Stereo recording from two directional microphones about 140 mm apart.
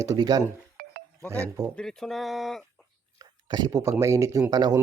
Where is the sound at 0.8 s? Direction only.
90° right.